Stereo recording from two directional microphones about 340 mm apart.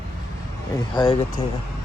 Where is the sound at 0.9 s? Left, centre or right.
Centre.